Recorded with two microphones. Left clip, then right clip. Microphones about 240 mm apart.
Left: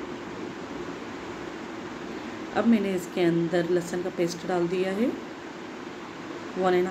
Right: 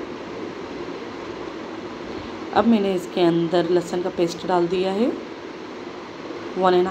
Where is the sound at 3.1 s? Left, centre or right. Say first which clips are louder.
Right 5 dB; centre.